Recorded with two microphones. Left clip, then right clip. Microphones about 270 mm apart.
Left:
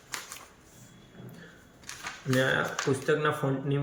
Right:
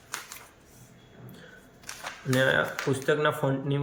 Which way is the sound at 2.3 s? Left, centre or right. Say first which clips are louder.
Right 3 dB; centre.